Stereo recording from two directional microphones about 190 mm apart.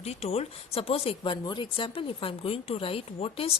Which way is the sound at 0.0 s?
35° left (ahead or behind).